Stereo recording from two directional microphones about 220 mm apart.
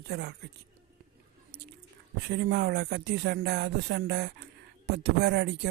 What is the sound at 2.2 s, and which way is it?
Speech, 50° right (ahead or behind).